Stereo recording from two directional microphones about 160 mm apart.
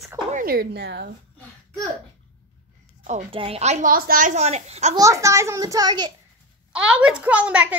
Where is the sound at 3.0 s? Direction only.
50° right (ahead or behind).